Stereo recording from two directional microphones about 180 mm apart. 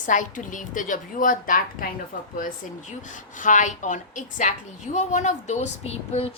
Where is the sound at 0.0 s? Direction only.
45° left (ahead or behind).